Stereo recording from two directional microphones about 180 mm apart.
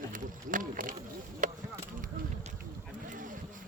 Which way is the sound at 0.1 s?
50° right (ahead or behind).